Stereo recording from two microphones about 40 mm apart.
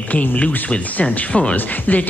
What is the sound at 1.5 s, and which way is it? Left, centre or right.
Speech, left.